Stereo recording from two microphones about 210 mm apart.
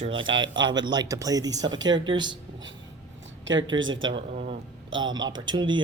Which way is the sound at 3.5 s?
65° right (ahead or behind).